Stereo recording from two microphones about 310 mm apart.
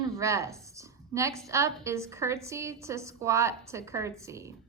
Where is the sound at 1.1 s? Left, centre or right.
Centre.